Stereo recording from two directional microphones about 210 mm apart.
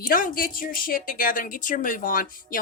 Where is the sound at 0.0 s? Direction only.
45° left (ahead or behind).